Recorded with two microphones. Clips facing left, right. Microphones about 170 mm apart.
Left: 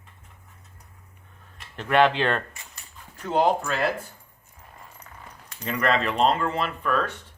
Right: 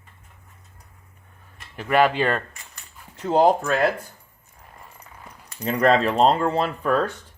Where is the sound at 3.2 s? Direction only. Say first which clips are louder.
Right 4 dB; 35° right (ahead or behind).